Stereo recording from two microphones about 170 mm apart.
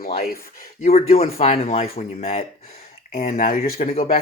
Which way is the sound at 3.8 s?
40° left (ahead or behind).